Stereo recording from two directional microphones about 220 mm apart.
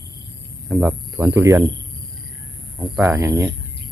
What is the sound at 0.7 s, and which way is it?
Speech, 5° right (ahead or behind).